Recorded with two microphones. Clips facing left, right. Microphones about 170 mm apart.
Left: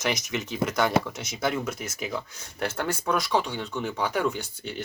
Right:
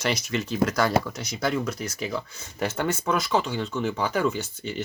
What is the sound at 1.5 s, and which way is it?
Speech, 5° left (ahead or behind).